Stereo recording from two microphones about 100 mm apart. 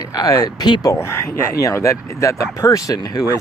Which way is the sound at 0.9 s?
25° left (ahead or behind).